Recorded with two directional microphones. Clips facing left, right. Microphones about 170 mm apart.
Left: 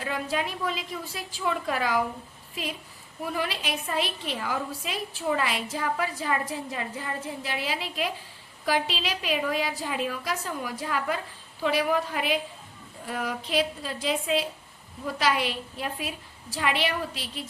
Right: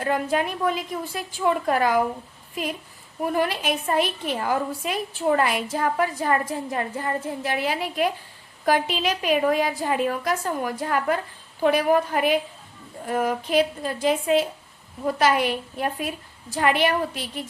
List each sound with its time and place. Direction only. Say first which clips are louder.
0.0 s a woman's voice: right 6 dB; 50° right (ahead or behind)
3.2 s a woman's voice: right 7 dB; 50° right (ahead or behind)